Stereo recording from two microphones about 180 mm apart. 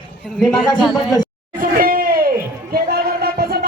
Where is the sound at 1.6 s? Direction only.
50° right (ahead or behind).